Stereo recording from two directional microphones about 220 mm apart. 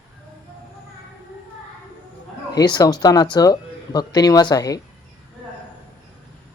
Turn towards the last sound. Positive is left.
turn(degrees=15)  # may be behind; listen again after turning